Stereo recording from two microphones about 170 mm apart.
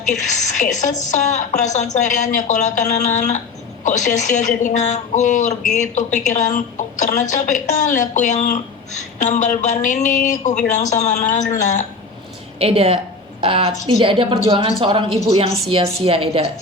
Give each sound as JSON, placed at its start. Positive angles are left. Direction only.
{"t": 0.0, "sound": "a woman's voice", "side_deg": 45}
{"t": 12.5, "sound": "a woman's voice", "side_deg": -35}